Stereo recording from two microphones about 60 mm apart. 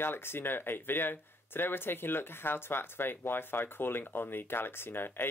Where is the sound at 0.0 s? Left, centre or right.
Left.